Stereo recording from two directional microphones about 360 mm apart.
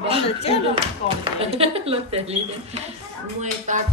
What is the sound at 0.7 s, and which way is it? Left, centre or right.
Speech, centre.